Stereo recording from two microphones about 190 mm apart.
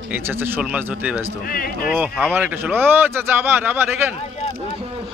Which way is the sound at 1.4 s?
50° left (ahead or behind).